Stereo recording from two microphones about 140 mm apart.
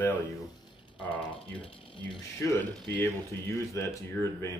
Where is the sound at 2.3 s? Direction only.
20° left (ahead or behind).